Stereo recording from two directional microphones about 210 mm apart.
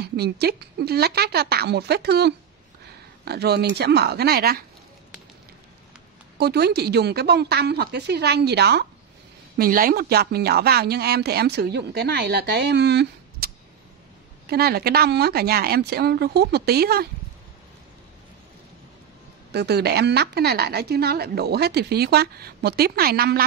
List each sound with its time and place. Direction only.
0.0 s speech: 50° right (ahead or behind)
6.3 s speech: 50° right (ahead or behind)
14.5 s speech: 45° right (ahead or behind)
19.5 s speech: 50° right (ahead or behind)